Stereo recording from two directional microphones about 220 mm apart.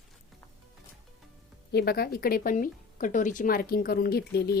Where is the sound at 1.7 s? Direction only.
45° left (ahead or behind).